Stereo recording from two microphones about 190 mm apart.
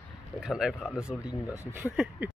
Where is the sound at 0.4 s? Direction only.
Centre (ahead or behind).